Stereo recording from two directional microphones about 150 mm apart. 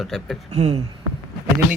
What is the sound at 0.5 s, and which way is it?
Speech, 45° right (ahead or behind).